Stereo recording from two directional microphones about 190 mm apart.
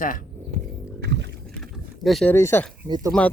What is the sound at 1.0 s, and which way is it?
Boat, 60° right (ahead or behind).